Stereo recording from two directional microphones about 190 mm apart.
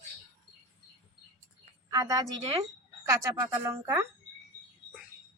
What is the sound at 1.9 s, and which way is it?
A woman's voice, 20° right (ahead or behind).